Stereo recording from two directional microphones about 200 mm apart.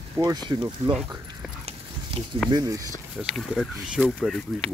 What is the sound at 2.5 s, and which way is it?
Speech, 20° right (ahead or behind).